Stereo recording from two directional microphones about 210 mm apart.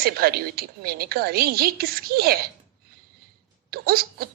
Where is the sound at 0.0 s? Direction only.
45° right (ahead or behind).